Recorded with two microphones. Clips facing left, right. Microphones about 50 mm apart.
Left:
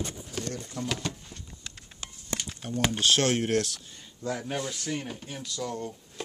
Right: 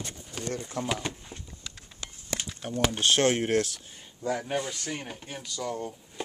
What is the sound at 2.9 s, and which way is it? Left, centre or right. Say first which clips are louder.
Speech: right 1 dB; centre.